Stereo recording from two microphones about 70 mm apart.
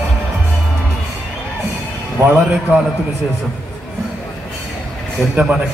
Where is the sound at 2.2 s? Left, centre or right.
Right.